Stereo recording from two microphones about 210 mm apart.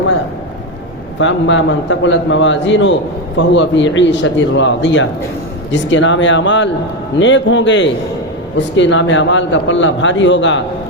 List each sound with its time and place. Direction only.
1.2 s a man's voice: 60° left (ahead or behind)